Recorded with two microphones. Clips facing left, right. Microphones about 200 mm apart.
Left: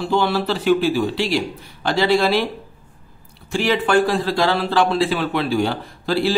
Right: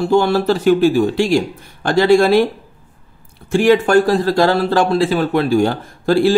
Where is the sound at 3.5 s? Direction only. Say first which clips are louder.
Right 7 dB; 50° right (ahead or behind).